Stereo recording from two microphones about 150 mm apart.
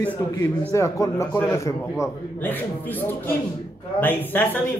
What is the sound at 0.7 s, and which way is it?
Speech, 20° left (ahead or behind).